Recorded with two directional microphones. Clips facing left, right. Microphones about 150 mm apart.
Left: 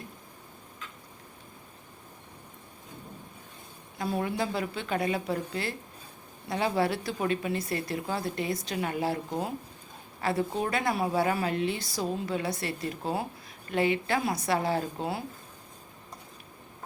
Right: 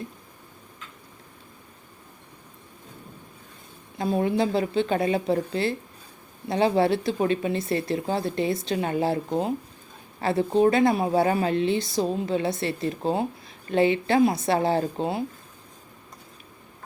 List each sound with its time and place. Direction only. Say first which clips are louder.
3.9 s a woman's voice: right 7 dB; 25° right (ahead or behind)